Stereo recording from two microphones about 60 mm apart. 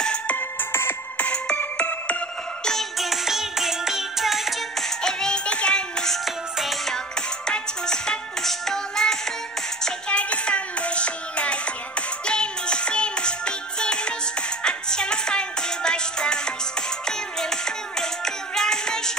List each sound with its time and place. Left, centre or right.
0.0 s music: centre
0.4 s ringtone: left
1.1 s music: left
2.6 s music: centre
6.2 s music: centre